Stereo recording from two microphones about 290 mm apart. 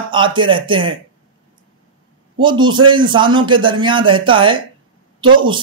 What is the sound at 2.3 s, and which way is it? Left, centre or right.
Speech, centre.